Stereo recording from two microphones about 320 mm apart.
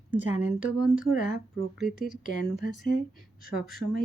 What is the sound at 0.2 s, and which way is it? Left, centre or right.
Speech, left.